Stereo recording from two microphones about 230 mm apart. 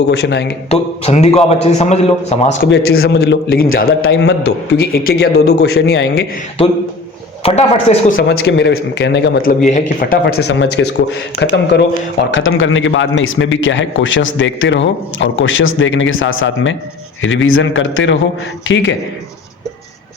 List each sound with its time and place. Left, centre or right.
0.1 s a man's voice: left
0.7 s a man's voice: left
2.6 s a man's voice: left
7.4 s a man's voice: left
8.3 s a man's voice: left
9.6 s a man's voice: left
12.3 s a man's voice: left